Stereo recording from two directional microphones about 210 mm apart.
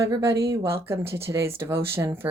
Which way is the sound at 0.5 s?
10° right (ahead or behind).